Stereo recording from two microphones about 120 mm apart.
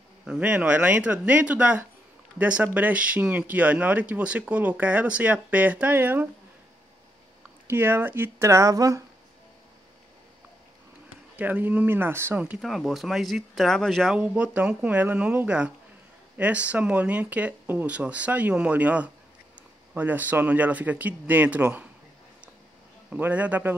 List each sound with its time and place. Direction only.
0.3 s speech: 10° right (ahead or behind)
7.6 s speech: 20° right (ahead or behind)
11.3 s speech: 15° right (ahead or behind)
12.6 s speech: centre (ahead or behind)
14.1 s speech: 10° right (ahead or behind)
23.0 s speech: 15° right (ahead or behind)